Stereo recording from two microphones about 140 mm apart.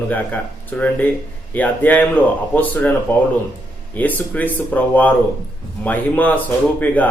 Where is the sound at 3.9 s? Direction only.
10° left (ahead or behind).